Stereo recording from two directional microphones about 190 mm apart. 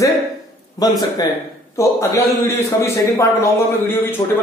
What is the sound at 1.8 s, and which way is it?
A man's voice, 15° left (ahead or behind).